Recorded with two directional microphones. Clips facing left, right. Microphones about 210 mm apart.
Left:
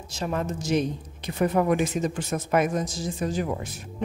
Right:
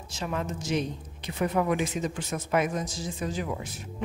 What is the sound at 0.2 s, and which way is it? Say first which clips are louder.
Speech: left 4 dB; 40° left (ahead or behind).